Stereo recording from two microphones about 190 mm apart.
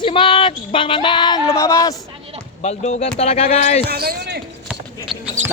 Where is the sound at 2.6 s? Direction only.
35° left (ahead or behind).